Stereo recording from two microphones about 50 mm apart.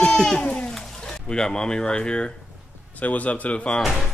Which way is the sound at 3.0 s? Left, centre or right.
Left.